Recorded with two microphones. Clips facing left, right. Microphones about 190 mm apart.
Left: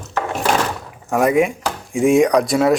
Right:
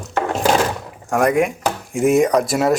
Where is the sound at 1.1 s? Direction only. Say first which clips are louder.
Left 1 dB; centre (ahead or behind).